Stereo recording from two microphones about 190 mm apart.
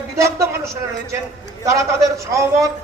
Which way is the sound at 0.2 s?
15° right (ahead or behind).